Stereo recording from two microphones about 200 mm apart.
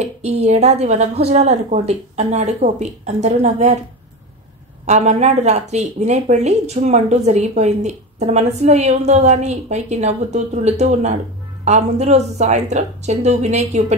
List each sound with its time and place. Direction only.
0.0 s speech: 30° right (ahead or behind)
4.8 s speech: 35° right (ahead or behind)